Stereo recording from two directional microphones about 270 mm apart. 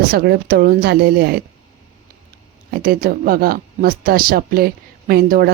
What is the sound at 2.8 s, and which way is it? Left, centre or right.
Speech, right.